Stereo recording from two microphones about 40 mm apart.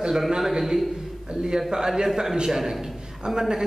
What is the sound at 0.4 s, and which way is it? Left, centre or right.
Speech, centre.